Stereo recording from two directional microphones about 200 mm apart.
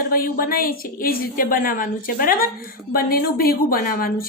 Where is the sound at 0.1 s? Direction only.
45° left (ahead or behind).